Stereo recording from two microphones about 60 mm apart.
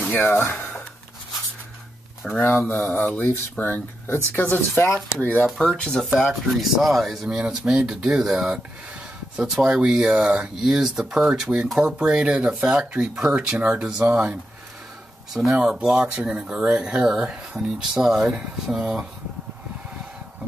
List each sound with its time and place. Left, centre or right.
0.1 s speech: left
2.2 s speech: centre
2.7 s speech: left
5.8 s speech: centre
9.7 s speech: centre
15.5 s speech: centre